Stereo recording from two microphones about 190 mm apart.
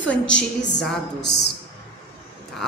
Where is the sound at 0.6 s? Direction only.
65° left (ahead or behind).